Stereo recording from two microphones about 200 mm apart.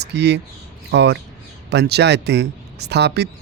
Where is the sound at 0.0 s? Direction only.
55° right (ahead or behind).